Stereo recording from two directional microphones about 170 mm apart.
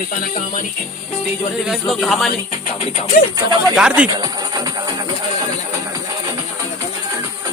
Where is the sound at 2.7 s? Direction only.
45° left (ahead or behind).